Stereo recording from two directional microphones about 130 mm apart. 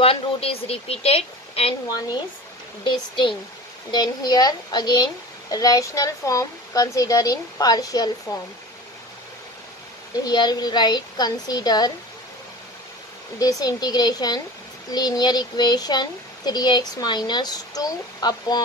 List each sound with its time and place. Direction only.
0.0 s a woman's voice: 45° left (ahead or behind)
2.8 s a child's voice: 35° left (ahead or behind)
10.2 s a child's voice: 30° left (ahead or behind)
13.4 s a child's voice: 30° left (ahead or behind)